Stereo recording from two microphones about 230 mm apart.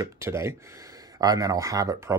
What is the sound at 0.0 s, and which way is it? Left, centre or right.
Speech, centre.